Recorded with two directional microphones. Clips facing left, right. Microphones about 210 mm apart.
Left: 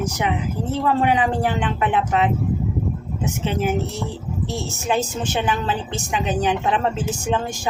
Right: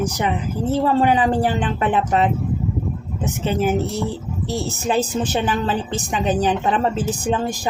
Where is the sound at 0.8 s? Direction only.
35° right (ahead or behind).